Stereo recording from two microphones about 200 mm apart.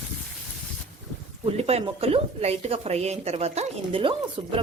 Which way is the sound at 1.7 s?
30° right (ahead or behind).